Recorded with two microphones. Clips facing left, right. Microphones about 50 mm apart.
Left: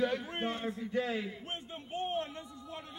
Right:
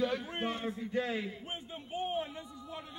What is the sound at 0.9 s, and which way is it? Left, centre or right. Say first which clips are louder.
Speech: left 1 dB; centre.